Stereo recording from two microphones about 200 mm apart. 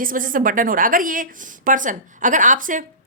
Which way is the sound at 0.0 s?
45° right (ahead or behind).